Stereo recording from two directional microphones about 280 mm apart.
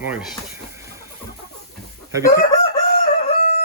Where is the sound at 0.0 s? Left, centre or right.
Centre.